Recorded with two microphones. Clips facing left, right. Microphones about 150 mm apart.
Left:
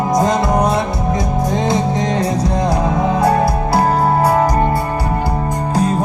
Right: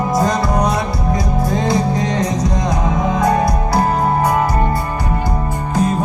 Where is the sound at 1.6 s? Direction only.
20° left (ahead or behind).